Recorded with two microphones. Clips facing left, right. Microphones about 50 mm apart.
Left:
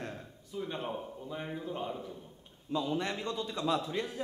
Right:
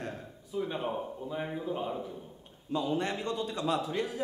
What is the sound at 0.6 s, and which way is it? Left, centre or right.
A man's voice, centre.